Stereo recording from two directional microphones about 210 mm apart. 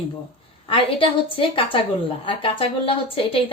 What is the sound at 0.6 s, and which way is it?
A woman's voice, 25° left (ahead or behind).